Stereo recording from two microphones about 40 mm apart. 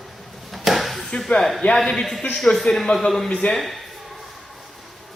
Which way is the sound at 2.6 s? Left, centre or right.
Centre.